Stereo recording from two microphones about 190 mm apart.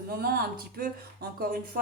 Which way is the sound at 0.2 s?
55° right (ahead or behind).